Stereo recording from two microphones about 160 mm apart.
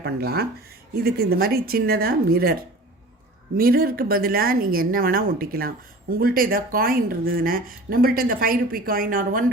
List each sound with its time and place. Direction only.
0.0 s speech: 80° right
3.6 s a woman's voice: 70° right (ahead or behind)